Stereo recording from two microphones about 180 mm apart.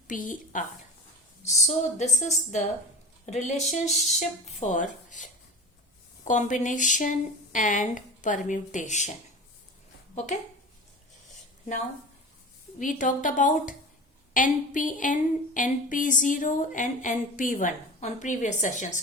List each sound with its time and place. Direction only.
0.1 s a woman's voice: 45° left (ahead or behind)
3.8 s speech: centre (ahead or behind)
4.6 s speech: 45° left (ahead or behind)
12.8 s speech: 45° left (ahead or behind)